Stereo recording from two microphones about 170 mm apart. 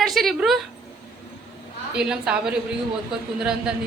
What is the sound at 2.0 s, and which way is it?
Speech, 5° right (ahead or behind).